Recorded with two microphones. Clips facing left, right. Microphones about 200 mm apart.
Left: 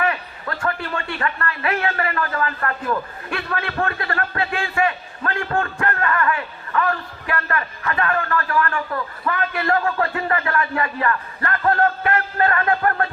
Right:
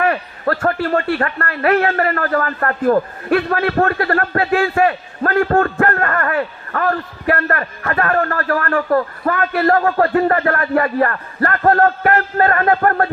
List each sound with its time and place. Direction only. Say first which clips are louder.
0.6 s speech: right 7 dB; 45° right (ahead or behind)
1.5 s speech: right 10 dB; 55° right (ahead or behind)